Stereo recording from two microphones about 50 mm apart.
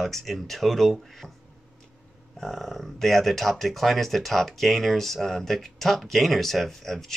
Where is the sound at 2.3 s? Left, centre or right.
Centre.